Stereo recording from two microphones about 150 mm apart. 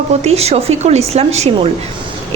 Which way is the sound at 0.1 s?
45° right (ahead or behind).